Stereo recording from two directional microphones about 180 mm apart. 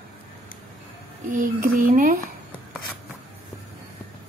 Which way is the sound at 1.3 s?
50° right (ahead or behind).